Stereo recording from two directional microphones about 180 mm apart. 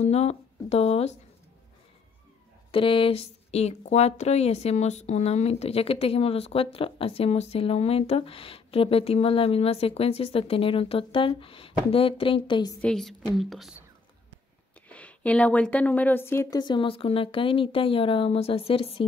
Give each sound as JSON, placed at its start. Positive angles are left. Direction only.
{"t": 0.0, "sound": "speech", "side_deg": 35}
{"t": 2.7, "sound": "speech", "side_deg": 30}
{"t": 12.8, "sound": "a woman's voice", "side_deg": 0}
{"t": 14.9, "sound": "a woman's voice", "side_deg": 5}